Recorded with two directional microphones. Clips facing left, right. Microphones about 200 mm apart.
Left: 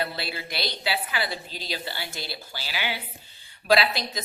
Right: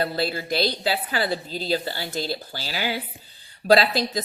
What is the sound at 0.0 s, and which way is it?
A woman's voice, 40° right (ahead or behind).